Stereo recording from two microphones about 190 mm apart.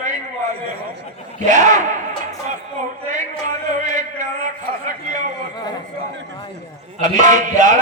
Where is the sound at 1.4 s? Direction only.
40° right (ahead or behind).